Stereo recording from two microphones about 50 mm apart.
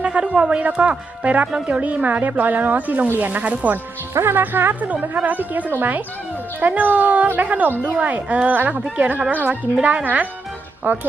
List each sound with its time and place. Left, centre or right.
0.0 s a woman's voice: right
4.1 s a woman's voice: right
4.4 s speech: right